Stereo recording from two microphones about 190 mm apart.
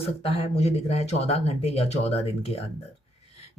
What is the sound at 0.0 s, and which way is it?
Speech, 30° left (ahead or behind).